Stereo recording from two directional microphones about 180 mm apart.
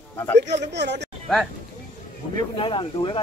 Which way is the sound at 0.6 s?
70° right (ahead or behind).